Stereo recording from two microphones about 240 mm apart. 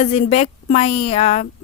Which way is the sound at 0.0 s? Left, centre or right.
Left.